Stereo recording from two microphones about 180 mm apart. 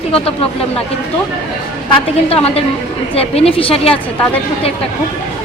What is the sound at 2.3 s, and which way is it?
A woman's voice, 35° left (ahead or behind).